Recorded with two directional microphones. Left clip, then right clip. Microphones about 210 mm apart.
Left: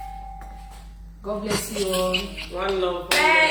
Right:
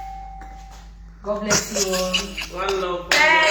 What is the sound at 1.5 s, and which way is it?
Speech, 15° right (ahead or behind).